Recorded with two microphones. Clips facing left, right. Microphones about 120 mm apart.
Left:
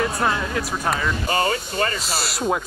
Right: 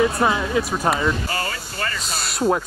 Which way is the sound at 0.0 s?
5° right (ahead or behind).